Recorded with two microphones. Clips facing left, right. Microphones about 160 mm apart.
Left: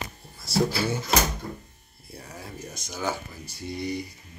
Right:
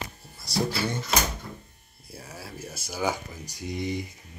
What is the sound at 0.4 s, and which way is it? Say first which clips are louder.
Speech: left 3 dB; centre (ahead or behind).